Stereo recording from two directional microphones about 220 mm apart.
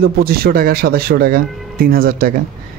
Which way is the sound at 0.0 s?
45° right (ahead or behind).